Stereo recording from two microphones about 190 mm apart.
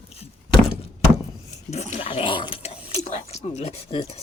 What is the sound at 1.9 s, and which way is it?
Speech, 30° left (ahead or behind).